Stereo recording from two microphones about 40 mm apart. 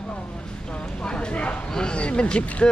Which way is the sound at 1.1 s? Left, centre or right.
Left.